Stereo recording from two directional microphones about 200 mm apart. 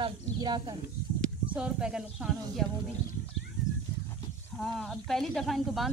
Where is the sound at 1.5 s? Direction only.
5° right (ahead or behind).